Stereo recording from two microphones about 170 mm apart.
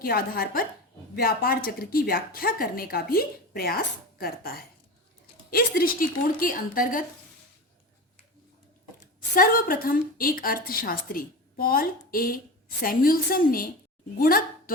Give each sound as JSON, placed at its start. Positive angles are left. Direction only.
{"t": 0.0, "sound": "a woman's voice", "side_deg": 60}
{"t": 9.3, "sound": "a woman's voice", "side_deg": 60}